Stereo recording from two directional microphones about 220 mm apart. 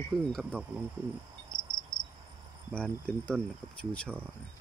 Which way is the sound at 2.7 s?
5° left (ahead or behind).